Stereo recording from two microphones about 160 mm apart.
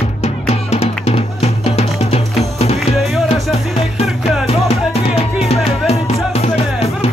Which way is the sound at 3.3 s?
40° left (ahead or behind).